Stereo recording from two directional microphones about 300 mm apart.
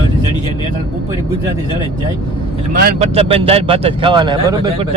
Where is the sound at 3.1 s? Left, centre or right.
Centre.